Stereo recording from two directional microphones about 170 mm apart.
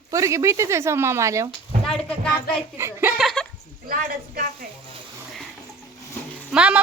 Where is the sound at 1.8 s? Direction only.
5° left (ahead or behind).